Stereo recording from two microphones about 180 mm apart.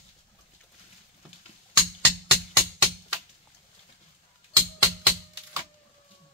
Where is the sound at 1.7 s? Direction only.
10° right (ahead or behind).